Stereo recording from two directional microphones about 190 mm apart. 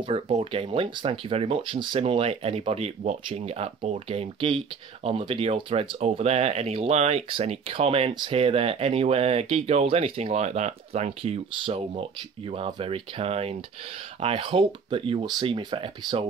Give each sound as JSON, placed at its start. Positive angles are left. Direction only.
{"t": 0.0, "sound": "speech", "side_deg": -30}